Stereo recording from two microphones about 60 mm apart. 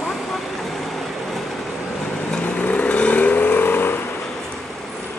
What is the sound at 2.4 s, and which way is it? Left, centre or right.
Vehicle, left.